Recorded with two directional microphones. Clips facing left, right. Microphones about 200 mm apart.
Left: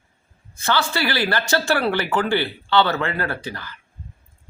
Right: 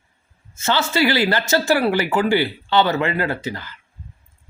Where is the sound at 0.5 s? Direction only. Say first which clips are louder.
Right 2 dB; 20° right (ahead or behind).